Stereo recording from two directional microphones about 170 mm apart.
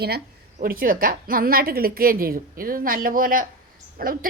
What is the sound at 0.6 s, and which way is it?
A woman's voice, 55° right (ahead or behind).